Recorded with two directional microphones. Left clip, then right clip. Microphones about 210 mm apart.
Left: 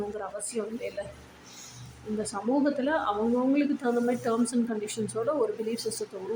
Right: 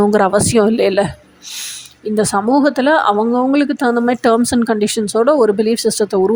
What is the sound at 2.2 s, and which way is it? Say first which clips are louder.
Speech: right 15 dB; 40° right (ahead or behind).